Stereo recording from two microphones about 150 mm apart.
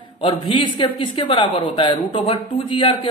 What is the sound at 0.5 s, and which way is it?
Speech, 35° left (ahead or behind).